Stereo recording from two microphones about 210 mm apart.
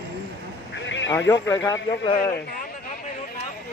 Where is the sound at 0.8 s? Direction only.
60° left (ahead or behind).